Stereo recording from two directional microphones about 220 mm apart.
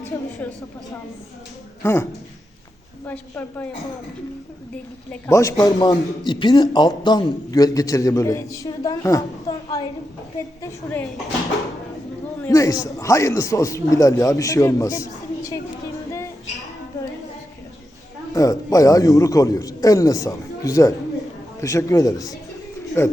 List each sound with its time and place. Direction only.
0.1 s a sound: 10° left (ahead or behind)
1.8 s a man's voice: 10° left (ahead or behind)
3.1 s a man's voice: 10° left (ahead or behind)
5.2 s a man's voice: 15° left (ahead or behind)
12.4 s a man's voice: 15° left (ahead or behind)
16.0 s a sound: 15° left (ahead or behind)
18.3 s a man's voice: 15° left (ahead or behind)